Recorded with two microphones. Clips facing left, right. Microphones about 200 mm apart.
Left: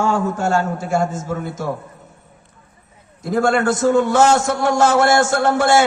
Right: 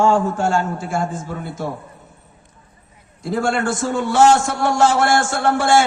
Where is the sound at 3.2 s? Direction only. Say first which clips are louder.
Left 3 dB; 45° left (ahead or behind).